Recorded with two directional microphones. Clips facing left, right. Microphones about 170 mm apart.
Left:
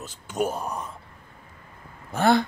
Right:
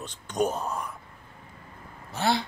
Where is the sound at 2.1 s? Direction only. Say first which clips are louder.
Left 6 dB; 50° left (ahead or behind).